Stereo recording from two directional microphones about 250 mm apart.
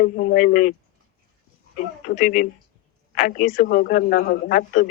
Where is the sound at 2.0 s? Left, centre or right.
Left.